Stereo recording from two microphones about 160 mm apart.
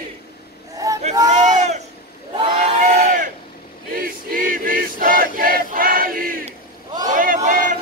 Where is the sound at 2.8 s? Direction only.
55° right (ahead or behind).